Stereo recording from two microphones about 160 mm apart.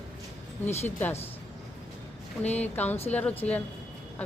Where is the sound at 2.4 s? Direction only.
10° left (ahead or behind).